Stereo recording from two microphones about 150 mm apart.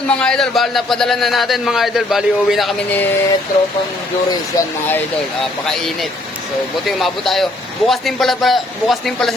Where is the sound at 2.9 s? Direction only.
10° left (ahead or behind).